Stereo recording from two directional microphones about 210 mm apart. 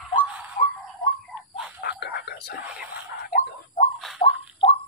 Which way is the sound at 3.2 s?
40° left (ahead or behind).